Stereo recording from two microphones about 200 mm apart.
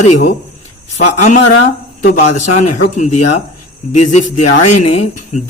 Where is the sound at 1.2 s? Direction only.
40° left (ahead or behind).